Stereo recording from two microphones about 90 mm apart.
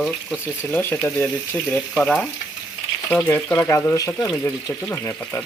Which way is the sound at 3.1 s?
10° left (ahead or behind).